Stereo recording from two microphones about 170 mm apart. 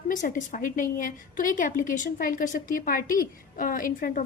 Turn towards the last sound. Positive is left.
turn(degrees=55)  # may be behind; listen again after turning